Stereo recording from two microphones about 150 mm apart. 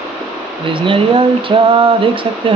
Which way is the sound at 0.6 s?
35° right (ahead or behind).